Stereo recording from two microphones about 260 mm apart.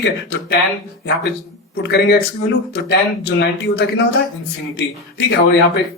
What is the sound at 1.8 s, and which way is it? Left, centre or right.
Speech, left.